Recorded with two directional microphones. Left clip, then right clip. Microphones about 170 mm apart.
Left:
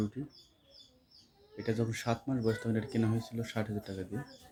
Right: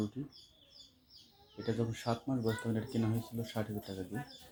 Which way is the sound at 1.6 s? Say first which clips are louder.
Left 2 dB; 15° left (ahead or behind).